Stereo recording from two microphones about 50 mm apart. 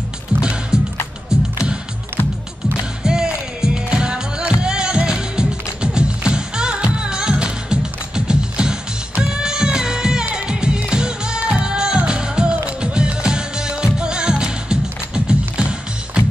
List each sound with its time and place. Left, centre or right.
0.4 s music: centre
3.0 s music: centre